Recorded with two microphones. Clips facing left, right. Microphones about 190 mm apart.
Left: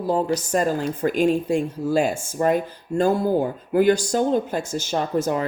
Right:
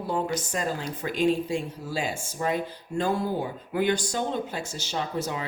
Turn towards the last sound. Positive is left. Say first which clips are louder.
# left 8 dB
turn(degrees=50)  # may be behind; listen again after turning